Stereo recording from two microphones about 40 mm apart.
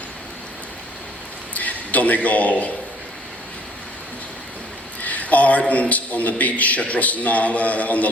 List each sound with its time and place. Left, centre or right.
1.5 s a man's voice: left
5.0 s a man's voice: left